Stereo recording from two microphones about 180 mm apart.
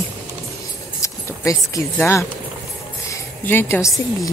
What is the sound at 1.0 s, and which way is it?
Speech, 15° left (ahead or behind).